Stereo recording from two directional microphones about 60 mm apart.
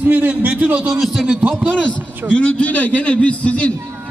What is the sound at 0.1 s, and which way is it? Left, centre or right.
A man's voice, right.